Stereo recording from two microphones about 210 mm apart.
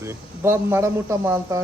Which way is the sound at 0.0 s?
10° right (ahead or behind).